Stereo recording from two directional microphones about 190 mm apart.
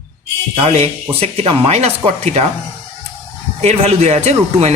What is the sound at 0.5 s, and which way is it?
Speech, 35° right (ahead or behind).